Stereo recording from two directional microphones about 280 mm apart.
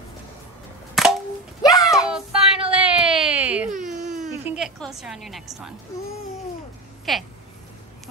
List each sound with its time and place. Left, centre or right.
1.0 s cap gun: centre
1.6 s a sound: centre
2.0 s baby cry: centre
3.7 s baby cry: right
4.2 s a woman's voice: centre
7.1 s speech: centre